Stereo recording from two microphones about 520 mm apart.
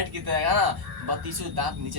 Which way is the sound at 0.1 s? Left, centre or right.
Right.